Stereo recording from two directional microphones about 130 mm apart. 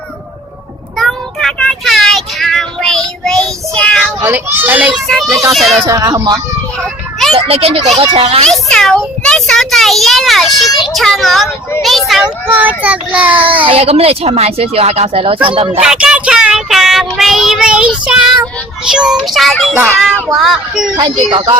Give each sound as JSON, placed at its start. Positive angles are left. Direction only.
{"t": 0.9, "sound": "child singing", "side_deg": 5}
{"t": 4.2, "sound": "a child's voice", "side_deg": -15}
{"t": 5.0, "sound": "child singing", "side_deg": 0}
{"t": 5.8, "sound": "speech", "side_deg": -30}
{"t": 6.8, "sound": "children playing", "side_deg": 0}
{"t": 7.3, "sound": "speech", "side_deg": -50}
{"t": 8.4, "sound": "child singing", "side_deg": 5}
{"t": 12.5, "sound": "a child's voice", "side_deg": -10}
{"t": 13.7, "sound": "speech", "side_deg": -50}
{"t": 15.8, "sound": "child singing", "side_deg": -5}
{"t": 19.7, "sound": "a child's voice", "side_deg": -15}
{"t": 20.3, "sound": "child singing", "side_deg": 0}
{"t": 20.9, "sound": "speech", "side_deg": -35}